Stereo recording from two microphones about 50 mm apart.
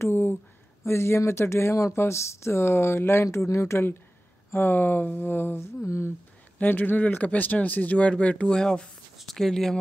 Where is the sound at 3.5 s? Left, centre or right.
Left.